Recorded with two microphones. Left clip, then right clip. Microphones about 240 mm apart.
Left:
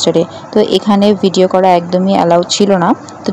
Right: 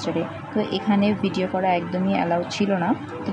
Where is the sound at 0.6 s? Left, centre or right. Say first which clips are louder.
Left 13 dB; left.